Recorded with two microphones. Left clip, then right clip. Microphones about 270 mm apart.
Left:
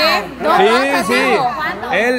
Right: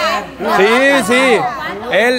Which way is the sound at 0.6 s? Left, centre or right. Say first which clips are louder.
Right 2 dB; centre.